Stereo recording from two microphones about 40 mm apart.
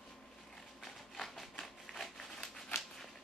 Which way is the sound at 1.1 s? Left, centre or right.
Centre.